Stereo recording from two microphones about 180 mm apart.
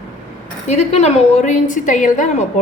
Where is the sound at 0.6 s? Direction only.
40° left (ahead or behind).